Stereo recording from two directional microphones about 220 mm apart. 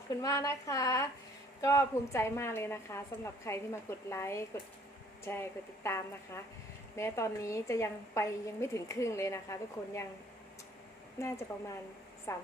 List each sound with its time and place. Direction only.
0.1 s a woman's voice: 15° left (ahead or behind)
12.3 s a woman's voice: 15° left (ahead or behind)